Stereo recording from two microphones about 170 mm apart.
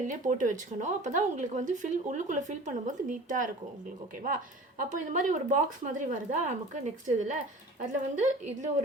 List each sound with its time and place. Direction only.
0.1 s speech: 50° right (ahead or behind)
4.8 s speech: 50° right (ahead or behind)